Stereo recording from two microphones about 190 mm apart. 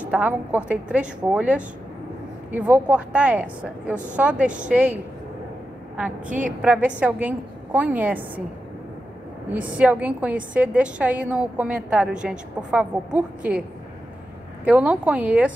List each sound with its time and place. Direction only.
0.0 s a woman's voice: 10° right (ahead or behind)
6.2 s a woman's voice: 45° right (ahead or behind)
6.6 s a woman's voice: 5° right (ahead or behind)
9.5 s a woman's voice: 5° right (ahead or behind)